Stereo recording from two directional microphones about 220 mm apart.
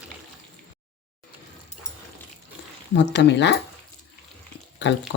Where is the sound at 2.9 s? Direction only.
50° left (ahead or behind).